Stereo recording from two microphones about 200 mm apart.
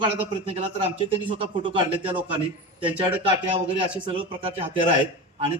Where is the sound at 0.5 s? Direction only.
30° right (ahead or behind).